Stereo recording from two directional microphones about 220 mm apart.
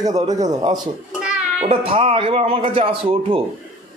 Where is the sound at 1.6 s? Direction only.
25° right (ahead or behind).